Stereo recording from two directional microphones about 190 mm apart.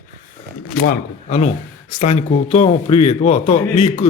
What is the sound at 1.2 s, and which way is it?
Speech, 40° left (ahead or behind).